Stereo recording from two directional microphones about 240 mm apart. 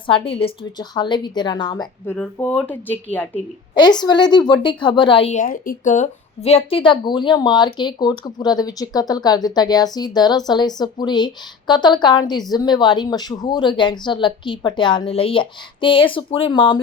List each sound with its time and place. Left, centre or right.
0.1 s a woman's voice: left
2.1 s a woman's voice: centre
3.8 s a woman's voice: centre